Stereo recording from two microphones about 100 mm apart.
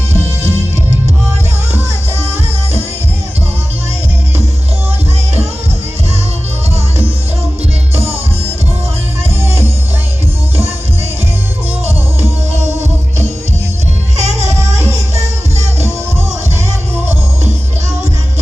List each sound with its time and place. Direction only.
1.7 s music: 90° right
7.9 s music: 90° right
14.2 s music: 90° right